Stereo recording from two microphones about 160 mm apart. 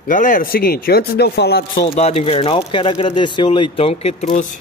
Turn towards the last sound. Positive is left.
turn(degrees=55)  # may be behind; listen again after turning